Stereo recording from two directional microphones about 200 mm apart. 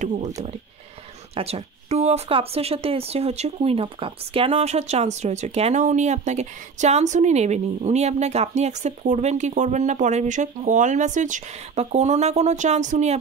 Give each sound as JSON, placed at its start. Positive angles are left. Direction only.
{"t": 1.3, "sound": "speech", "side_deg": -30}